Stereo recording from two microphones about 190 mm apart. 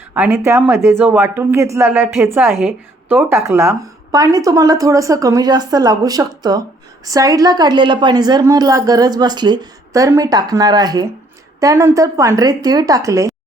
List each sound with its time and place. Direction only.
0.1 s a woman's voice: 10° right (ahead or behind)